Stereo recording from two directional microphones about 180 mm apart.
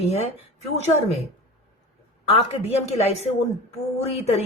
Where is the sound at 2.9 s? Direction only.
35° left (ahead or behind).